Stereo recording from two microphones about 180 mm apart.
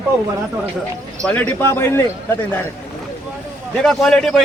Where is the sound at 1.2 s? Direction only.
10° left (ahead or behind).